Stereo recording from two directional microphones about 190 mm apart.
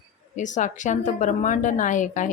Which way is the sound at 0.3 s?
40° left (ahead or behind).